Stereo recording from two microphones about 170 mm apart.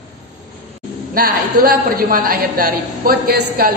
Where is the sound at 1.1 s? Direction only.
60° right (ahead or behind).